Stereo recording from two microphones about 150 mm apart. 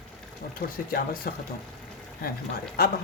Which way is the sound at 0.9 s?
75° left (ahead or behind).